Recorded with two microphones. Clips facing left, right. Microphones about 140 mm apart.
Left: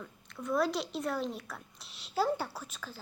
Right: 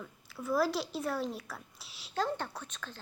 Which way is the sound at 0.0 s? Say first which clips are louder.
Even; 5° right (ahead or behind).